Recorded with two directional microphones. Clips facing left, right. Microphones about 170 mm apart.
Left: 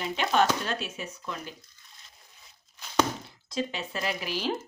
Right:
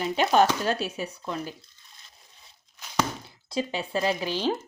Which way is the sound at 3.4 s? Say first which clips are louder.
Right 3 dB; 30° right (ahead or behind).